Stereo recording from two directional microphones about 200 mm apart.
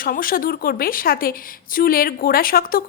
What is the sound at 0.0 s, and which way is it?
Speech, 45° left (ahead or behind).